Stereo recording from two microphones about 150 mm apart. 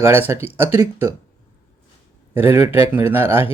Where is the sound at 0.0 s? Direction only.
15° right (ahead or behind).